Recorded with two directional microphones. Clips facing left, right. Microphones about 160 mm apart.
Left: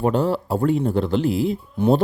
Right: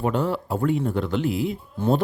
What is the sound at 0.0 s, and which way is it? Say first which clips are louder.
Speech: left 4 dB; 35° left (ahead or behind).